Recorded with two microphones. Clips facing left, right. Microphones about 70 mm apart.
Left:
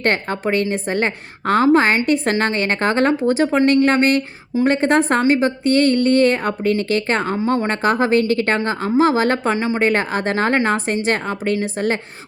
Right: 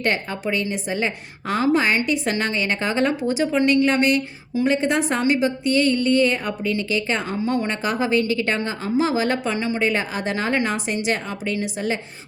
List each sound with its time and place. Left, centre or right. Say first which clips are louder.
0.0 s speech: left 4 dB; left
9.8 s speech: left 6 dB; left